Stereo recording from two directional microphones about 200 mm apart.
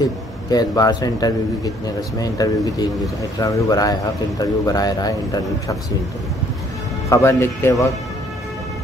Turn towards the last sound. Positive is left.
turn(degrees=15)  # may be behind; listen again after turning